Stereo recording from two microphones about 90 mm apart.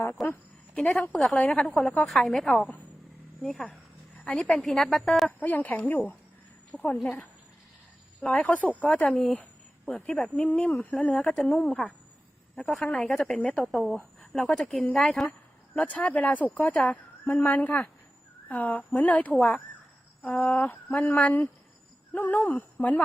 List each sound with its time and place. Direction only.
0.2 s a woman's voice: centre (ahead or behind)
0.8 s a woman's voice: 15° left (ahead or behind)
5.4 s speech: 20° left (ahead or behind)
8.2 s speech: 15° left (ahead or behind)
9.3 s a sound: 15° left (ahead or behind)
10.2 s a woman's voice: 5° left (ahead or behind)
10.4 s speech: 15° left (ahead or behind)
11.0 s a woman's voice: 5° left (ahead or behind)
15.3 s speech: 15° left (ahead or behind)